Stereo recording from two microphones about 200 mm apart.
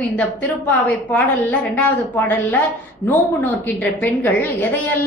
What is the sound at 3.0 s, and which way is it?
A woman's voice, 10° left (ahead or behind).